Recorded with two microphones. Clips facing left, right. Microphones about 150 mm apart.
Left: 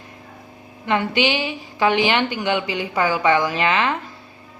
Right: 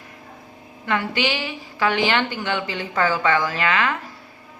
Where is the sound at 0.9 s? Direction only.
20° left (ahead or behind).